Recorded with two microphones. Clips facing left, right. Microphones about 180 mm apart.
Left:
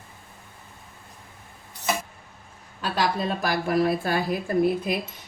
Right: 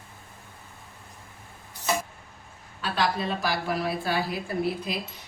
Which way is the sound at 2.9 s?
50° left (ahead or behind).